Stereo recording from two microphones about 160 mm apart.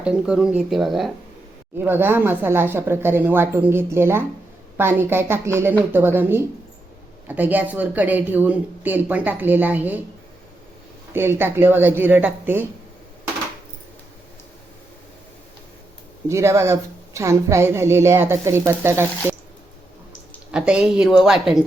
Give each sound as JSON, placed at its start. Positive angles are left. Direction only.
{"t": 0.0, "sound": "speech", "side_deg": -5}
{"t": 1.8, "sound": "speech", "side_deg": -15}
{"t": 11.1, "sound": "speech", "side_deg": -15}
{"t": 16.3, "sound": "speech", "side_deg": -15}
{"t": 20.5, "sound": "speech", "side_deg": -5}